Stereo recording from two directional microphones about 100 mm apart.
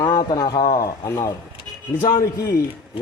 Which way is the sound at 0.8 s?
30° left (ahead or behind).